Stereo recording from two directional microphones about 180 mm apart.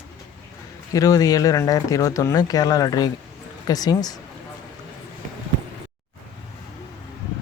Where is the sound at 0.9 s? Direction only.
20° left (ahead or behind).